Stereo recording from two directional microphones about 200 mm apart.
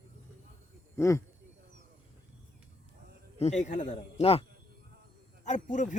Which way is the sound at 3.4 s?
35° left (ahead or behind).